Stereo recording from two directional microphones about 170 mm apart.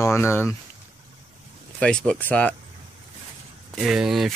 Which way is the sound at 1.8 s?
5° left (ahead or behind).